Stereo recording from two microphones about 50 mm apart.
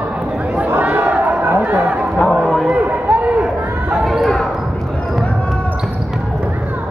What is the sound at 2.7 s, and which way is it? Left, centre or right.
Run, right.